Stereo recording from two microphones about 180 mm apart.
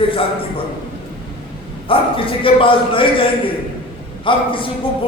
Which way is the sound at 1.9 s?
30° left (ahead or behind).